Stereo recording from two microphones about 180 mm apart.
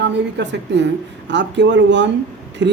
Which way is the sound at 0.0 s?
75° right (ahead or behind).